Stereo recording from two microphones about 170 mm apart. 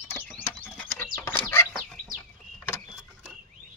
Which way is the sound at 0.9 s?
10° left (ahead or behind).